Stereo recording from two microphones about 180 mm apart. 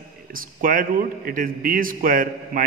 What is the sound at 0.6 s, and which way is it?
A man's voice, 50° right (ahead or behind).